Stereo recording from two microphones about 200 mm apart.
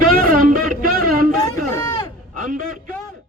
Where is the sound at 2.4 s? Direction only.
40° right (ahead or behind).